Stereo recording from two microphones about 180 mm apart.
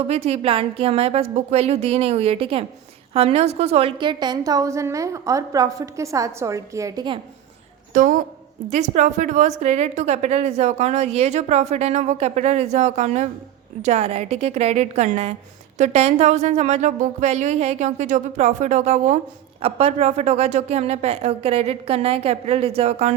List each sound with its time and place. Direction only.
0.1 s a woman's voice: 35° right (ahead or behind)
7.9 s a woman's voice: 50° right (ahead or behind)